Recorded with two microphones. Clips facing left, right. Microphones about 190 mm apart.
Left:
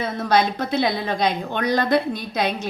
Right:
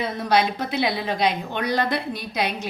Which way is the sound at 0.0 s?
15° right (ahead or behind).